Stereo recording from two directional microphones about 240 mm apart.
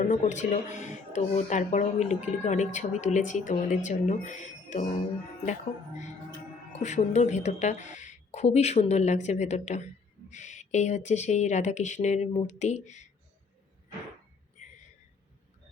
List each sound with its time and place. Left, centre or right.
0.0 s speech: left
6.7 s speech: left